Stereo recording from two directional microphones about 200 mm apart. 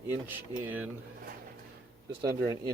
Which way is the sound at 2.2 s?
20° right (ahead or behind).